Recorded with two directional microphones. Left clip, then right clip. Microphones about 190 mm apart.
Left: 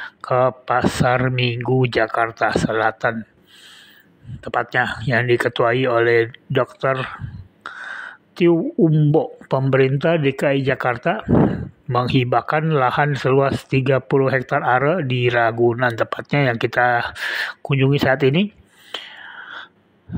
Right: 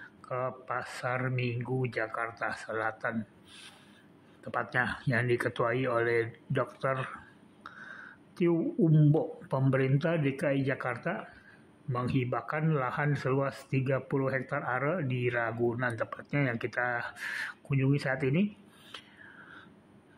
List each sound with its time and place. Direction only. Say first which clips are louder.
0.0 s speech: left 17 dB; 40° left (ahead or behind)
4.5 s speech: left 11 dB; 30° left (ahead or behind)
7.6 s a sound: left 15 dB; 30° left (ahead or behind)
9.1 s speech: left 12 dB; 30° left (ahead or behind)